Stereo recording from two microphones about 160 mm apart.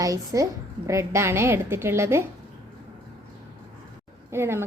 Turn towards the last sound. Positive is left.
turn(degrees=-15)  # may be behind; listen again after turning